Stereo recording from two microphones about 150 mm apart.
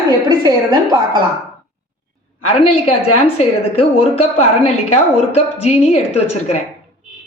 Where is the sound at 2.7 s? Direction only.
40° left (ahead or behind).